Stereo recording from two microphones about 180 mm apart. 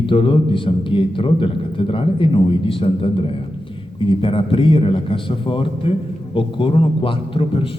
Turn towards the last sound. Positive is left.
turn(degrees=30)  # may be behind; listen again after turning